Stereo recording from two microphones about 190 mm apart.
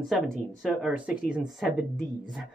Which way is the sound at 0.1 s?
Centre (ahead or behind).